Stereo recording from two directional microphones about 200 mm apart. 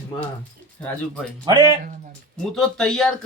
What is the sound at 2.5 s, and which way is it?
Speech, centre (ahead or behind).